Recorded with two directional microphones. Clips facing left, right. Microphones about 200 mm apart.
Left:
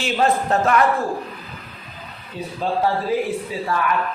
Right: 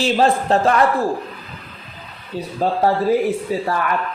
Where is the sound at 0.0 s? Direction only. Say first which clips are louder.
Right 3 dB; 30° right (ahead or behind).